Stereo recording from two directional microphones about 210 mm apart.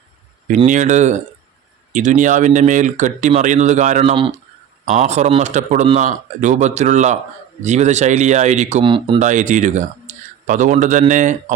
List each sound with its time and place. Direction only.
0.4 s speech: 35° right (ahead or behind)
4.1 s speech: 25° right (ahead or behind)
8.8 s speech: 20° right (ahead or behind)
9.1 s speech: 35° right (ahead or behind)